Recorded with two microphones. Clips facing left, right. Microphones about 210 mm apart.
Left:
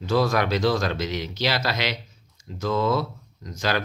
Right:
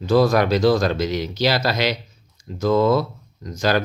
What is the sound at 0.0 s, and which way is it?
Speech, 40° right (ahead or behind).